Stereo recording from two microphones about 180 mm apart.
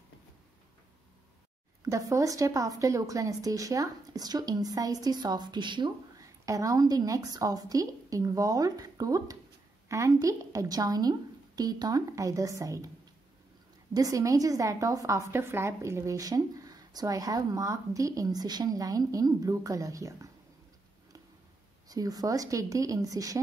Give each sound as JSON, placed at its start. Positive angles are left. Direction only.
{"t": 1.9, "sound": "a woman's voice", "side_deg": -15}
{"t": 13.9, "sound": "a woman's voice", "side_deg": -20}
{"t": 21.8, "sound": "a woman's voice", "side_deg": -20}